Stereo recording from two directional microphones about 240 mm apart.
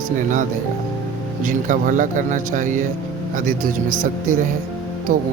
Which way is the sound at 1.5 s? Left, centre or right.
Right.